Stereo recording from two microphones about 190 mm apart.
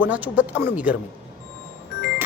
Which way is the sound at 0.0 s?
10° right (ahead or behind).